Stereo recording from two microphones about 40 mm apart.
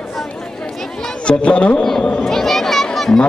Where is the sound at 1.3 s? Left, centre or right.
Left.